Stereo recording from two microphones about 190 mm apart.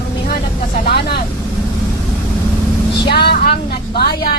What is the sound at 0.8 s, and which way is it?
Speech, 60° left (ahead or behind).